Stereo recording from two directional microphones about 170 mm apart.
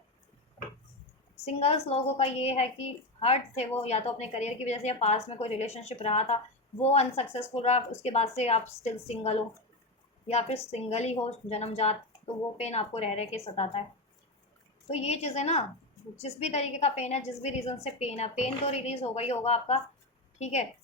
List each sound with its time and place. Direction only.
1.5 s a woman's voice: 35° left (ahead or behind)
14.8 s a woman's voice: 40° left (ahead or behind)